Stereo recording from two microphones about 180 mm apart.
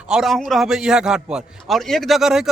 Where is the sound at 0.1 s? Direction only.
Centre (ahead or behind).